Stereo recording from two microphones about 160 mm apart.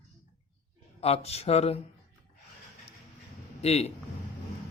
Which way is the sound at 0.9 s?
40° left (ahead or behind).